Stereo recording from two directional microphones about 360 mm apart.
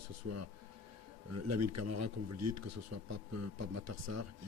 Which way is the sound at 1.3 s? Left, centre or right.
Right.